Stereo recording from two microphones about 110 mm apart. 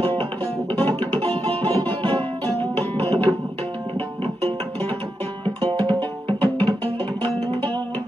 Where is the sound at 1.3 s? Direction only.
55° right (ahead or behind).